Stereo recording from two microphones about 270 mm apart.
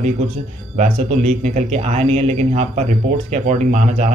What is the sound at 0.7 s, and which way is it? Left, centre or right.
Speech, right.